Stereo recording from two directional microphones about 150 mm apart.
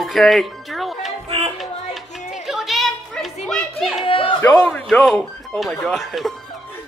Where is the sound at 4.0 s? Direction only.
35° left (ahead or behind).